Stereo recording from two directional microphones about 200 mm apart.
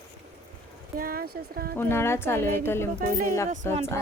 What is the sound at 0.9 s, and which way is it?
Speech, 45° right (ahead or behind).